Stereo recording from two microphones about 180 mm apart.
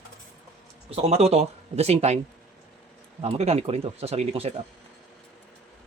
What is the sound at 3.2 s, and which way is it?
Speech, 35° right (ahead or behind).